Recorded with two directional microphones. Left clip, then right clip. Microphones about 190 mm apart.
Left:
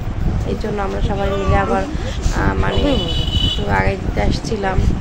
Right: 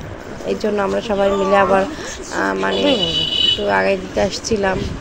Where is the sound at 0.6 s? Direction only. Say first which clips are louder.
Right 5 dB; 20° right (ahead or behind).